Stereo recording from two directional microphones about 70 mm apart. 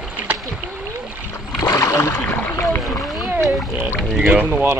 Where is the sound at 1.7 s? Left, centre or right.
Left.